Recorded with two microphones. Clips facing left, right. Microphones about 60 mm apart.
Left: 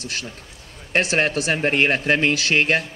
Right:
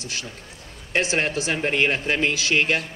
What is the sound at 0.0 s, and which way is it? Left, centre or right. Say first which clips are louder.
Speech: left 2 dB; left.